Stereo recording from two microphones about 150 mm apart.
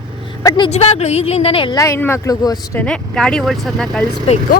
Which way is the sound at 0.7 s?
45° left (ahead or behind).